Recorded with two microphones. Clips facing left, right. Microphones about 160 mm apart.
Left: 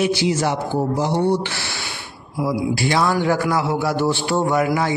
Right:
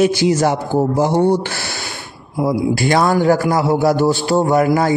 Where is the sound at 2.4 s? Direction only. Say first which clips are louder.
Right 4 dB; 50° right (ahead or behind).